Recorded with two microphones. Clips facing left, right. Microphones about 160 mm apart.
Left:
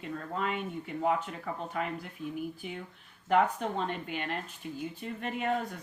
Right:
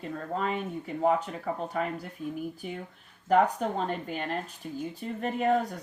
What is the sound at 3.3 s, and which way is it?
Speech, 40° right (ahead or behind).